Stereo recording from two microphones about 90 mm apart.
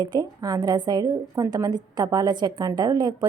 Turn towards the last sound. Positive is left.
turn(degrees=-50)  # may be behind; listen again after turning